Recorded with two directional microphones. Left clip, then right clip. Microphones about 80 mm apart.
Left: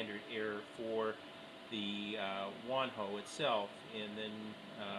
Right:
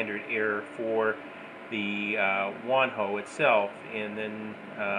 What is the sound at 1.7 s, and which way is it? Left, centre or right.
Speech, centre.